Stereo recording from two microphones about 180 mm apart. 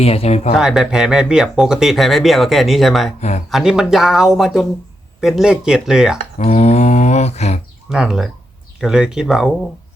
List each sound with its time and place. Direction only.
0.0 s speech: 35° left (ahead or behind)
0.5 s speech: 5° right (ahead or behind)
3.2 s speech: 40° left (ahead or behind)
3.5 s speech: 5° right (ahead or behind)
6.4 s mantra: 35° left (ahead or behind)
7.9 s speech: centre (ahead or behind)